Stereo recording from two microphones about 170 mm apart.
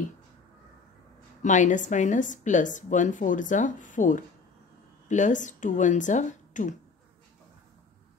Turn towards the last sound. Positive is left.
turn(degrees=45)  # may be behind; listen again after turning